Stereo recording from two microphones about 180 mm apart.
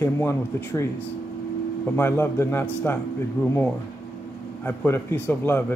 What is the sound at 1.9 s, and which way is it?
Speech, 10° left (ahead or behind).